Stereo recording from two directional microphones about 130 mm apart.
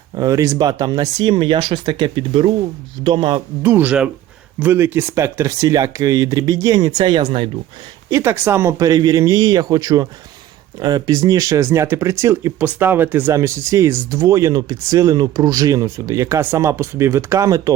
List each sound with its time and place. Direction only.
0.2 s speech: 25° right (ahead or behind)
3.6 s speech: 15° right (ahead or behind); by 7.5 s 40° right (ahead or behind)
8.1 s speech: 20° right (ahead or behind)